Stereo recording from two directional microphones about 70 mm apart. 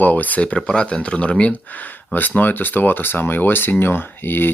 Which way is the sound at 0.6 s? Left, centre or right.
Centre.